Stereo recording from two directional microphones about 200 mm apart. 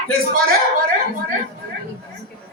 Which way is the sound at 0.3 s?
50° right (ahead or behind).